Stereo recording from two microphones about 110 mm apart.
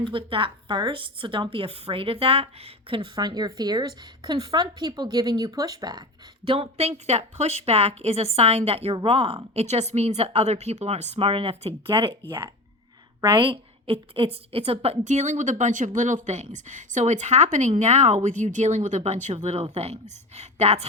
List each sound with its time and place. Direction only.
0.0 s a woman's voice: 50° right (ahead or behind)
6.4 s a woman's voice: 60° right (ahead or behind); by 20.8 s 85° right